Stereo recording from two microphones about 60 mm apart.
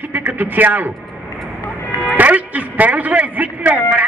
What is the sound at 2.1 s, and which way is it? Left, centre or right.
A man's voice, right.